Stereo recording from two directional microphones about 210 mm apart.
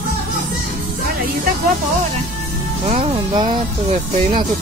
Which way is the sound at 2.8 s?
30° right (ahead or behind).